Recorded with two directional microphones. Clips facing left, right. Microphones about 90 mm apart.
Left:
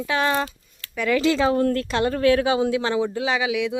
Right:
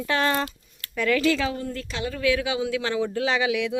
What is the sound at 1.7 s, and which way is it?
Speech, 55° left (ahead or behind).